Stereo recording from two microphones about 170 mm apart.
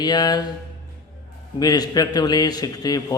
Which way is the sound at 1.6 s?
25° left (ahead or behind).